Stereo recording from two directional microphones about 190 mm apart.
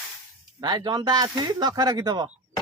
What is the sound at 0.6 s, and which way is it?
Speech, 25° right (ahead or behind).